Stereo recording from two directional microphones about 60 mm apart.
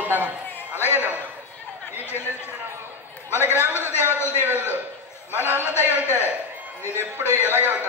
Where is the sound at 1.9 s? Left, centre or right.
Left.